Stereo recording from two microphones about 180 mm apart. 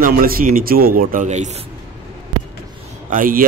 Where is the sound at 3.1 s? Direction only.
50° right (ahead or behind).